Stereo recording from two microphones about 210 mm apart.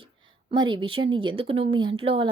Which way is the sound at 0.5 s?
25° right (ahead or behind).